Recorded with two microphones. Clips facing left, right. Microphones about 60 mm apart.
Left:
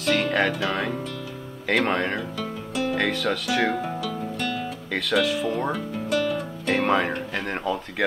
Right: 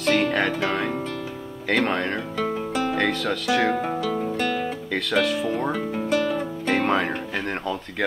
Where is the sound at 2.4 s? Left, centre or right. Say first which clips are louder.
Right 4 dB; right.